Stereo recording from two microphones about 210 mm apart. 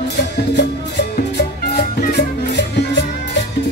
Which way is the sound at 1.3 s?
50° left (ahead or behind).